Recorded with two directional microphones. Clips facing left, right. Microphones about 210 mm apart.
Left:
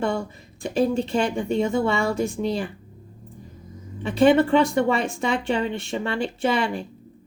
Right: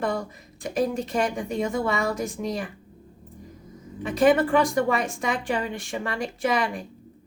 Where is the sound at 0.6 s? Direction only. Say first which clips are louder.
Left 4 dB; 30° left (ahead or behind).